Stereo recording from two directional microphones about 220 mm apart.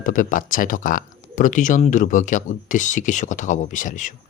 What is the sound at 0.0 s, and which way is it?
Speech, 35° left (ahead or behind).